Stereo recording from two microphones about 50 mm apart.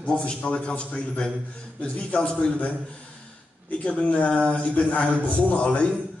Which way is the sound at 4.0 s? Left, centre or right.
Left.